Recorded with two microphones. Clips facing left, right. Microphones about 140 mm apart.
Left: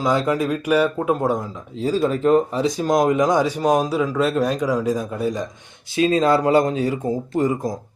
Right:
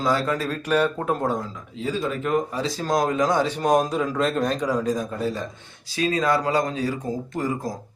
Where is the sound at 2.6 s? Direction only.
20° left (ahead or behind).